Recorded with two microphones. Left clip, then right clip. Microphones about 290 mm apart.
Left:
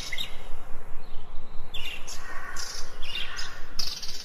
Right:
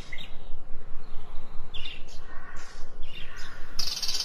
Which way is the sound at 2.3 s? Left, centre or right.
Left.